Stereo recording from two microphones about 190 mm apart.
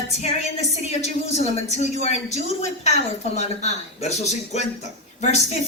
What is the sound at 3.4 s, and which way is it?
A woman's voice, 35° left (ahead or behind).